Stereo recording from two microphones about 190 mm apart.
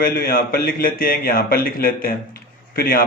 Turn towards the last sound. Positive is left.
turn(degrees=50)  # may be behind; listen again after turning